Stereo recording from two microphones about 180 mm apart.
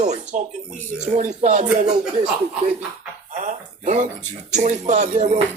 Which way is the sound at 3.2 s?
45° right (ahead or behind).